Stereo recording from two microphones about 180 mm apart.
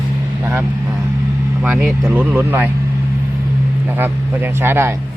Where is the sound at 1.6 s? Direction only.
10° right (ahead or behind).